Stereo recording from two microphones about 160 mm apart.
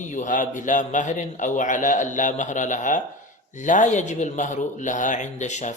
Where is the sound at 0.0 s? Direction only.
50° left (ahead or behind).